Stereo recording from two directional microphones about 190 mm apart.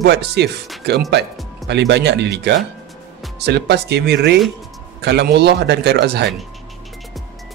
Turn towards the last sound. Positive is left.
turn(degrees=-60)  # may be behind; listen again after turning